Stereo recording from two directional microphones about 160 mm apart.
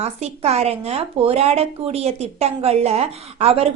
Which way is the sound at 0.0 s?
40° right (ahead or behind).